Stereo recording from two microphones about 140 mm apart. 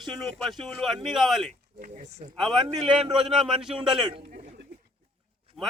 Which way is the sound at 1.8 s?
65° right (ahead or behind).